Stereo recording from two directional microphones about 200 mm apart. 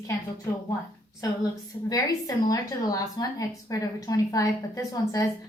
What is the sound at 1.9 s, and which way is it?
A woman's voice, 20° left (ahead or behind).